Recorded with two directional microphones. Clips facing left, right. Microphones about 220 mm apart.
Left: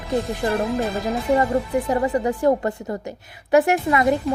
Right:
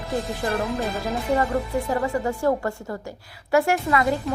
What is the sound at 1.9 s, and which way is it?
A woman's voice, 15° left (ahead or behind).